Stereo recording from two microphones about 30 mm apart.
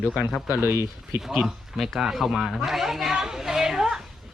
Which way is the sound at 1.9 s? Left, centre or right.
Centre.